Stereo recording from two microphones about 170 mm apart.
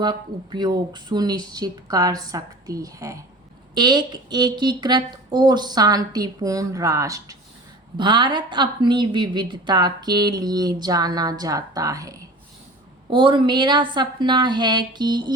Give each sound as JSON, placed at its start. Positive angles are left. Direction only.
{"t": 0.0, "sound": "a woman's voice", "side_deg": -25}